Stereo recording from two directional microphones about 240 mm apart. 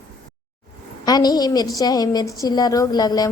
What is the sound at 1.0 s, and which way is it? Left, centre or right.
A woman's voice, centre.